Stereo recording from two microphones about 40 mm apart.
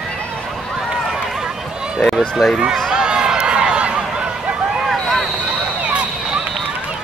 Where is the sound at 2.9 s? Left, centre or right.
Centre.